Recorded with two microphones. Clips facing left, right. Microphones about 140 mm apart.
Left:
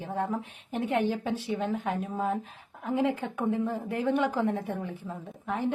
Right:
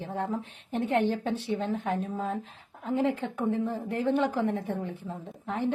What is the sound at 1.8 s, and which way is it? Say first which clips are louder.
Speech: right 1 dB; 35° right (ahead or behind).